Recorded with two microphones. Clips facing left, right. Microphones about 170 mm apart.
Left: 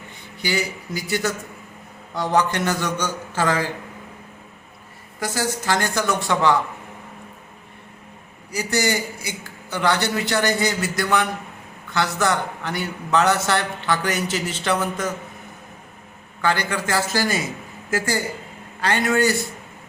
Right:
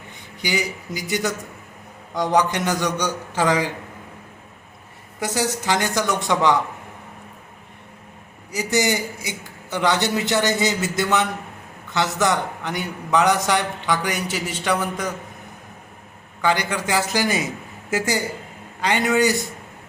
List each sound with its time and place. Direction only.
0.4 s a man's voice: 15° right (ahead or behind)
5.2 s a man's voice: 20° right (ahead or behind)
8.5 s a man's voice: 20° right (ahead or behind)
16.4 s a man's voice: 15° right (ahead or behind)